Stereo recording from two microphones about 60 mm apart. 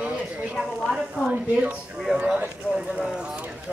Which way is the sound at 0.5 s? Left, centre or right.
Centre.